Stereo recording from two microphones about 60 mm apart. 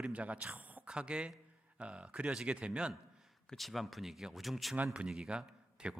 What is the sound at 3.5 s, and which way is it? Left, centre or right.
Speech, centre.